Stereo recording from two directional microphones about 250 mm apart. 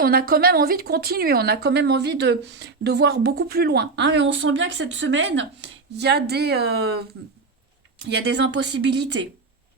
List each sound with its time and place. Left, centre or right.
0.0 s speech: right
8.0 s a woman's voice: right